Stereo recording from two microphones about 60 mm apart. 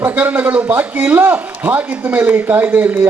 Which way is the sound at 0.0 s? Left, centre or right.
Right.